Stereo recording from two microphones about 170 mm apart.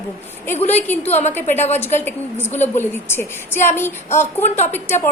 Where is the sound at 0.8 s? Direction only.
10° left (ahead or behind).